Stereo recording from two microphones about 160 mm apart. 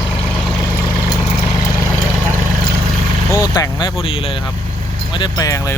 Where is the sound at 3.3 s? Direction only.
25° left (ahead or behind).